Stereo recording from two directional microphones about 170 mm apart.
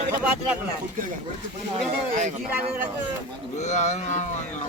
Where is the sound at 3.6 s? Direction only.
40° left (ahead or behind).